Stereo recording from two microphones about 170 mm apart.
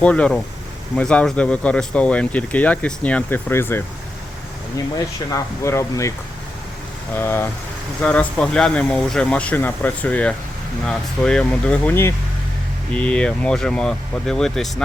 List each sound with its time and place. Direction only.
0.0 s speech: 5° left (ahead or behind)
4.9 s speech: 20° left (ahead or behind)
7.2 s speech: 15° left (ahead or behind)